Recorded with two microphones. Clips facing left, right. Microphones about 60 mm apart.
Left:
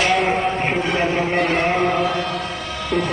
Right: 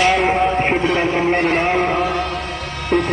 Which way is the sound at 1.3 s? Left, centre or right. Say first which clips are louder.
Right 2 dB; right.